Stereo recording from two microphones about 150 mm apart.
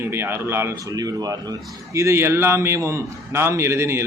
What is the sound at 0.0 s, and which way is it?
A man's voice, 15° right (ahead or behind).